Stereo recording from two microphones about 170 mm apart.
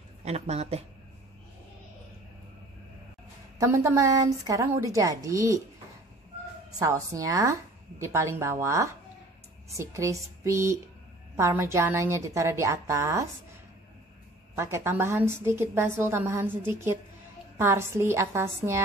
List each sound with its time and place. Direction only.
0.2 s a woman's voice: 40° right (ahead or behind)
3.5 s a woman's voice: 15° right (ahead or behind)
6.8 s a woman's voice: 20° right (ahead or behind)
14.5 s a woman's voice: 15° right (ahead or behind)